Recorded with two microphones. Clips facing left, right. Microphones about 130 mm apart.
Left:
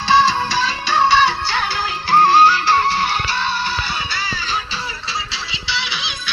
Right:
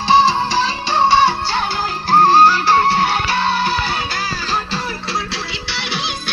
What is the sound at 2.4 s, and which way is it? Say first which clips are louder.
Music: right 2 dB; 50° right (ahead or behind).